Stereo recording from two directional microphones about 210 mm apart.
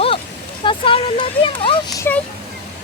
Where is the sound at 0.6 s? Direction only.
25° left (ahead or behind).